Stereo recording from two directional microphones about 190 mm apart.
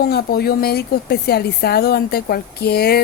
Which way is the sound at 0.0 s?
55° left (ahead or behind).